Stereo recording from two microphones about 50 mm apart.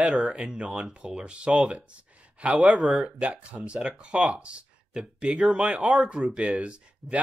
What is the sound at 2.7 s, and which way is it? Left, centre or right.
Speech, centre.